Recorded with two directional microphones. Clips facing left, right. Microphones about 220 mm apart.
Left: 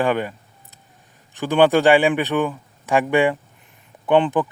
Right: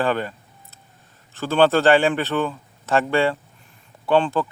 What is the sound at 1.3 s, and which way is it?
Speech, 15° left (ahead or behind).